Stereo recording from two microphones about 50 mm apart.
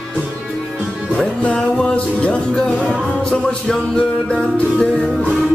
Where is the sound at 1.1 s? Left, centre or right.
Left.